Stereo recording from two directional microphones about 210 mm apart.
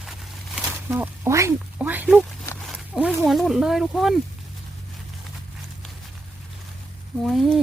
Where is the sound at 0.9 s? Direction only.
10° right (ahead or behind).